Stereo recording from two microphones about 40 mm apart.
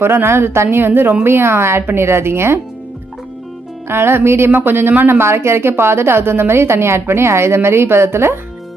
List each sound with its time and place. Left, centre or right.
0.0 s a woman's voice: right
1.2 s speech: right
3.8 s speech: right